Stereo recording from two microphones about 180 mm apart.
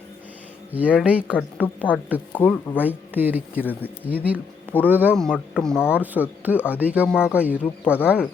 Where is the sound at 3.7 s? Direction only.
10° left (ahead or behind).